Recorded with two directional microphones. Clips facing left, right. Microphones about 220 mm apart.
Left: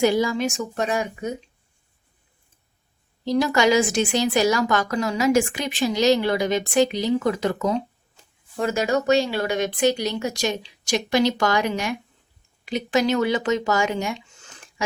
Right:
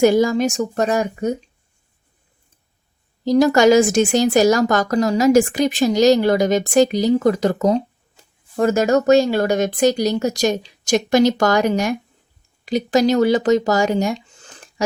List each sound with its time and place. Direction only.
0.0 s speech: 45° right (ahead or behind)
3.2 s a woman's voice: 45° right (ahead or behind)